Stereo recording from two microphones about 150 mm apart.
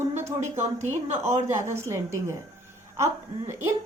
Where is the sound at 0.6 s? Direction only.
50° right (ahead or behind).